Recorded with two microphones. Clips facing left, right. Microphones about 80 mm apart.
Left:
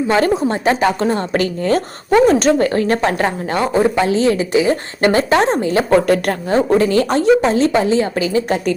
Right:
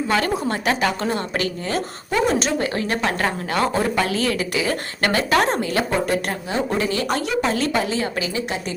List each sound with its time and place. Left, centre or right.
0.1 s speech: left
1.6 s speech: left
6.5 s a woman's voice: left